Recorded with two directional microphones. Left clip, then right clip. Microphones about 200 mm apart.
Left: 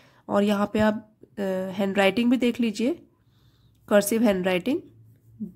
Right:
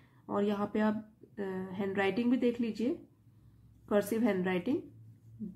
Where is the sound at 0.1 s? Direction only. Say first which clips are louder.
Left 9 dB; 40° left (ahead or behind).